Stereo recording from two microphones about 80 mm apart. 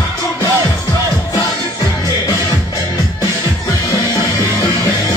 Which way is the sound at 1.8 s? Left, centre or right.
Left.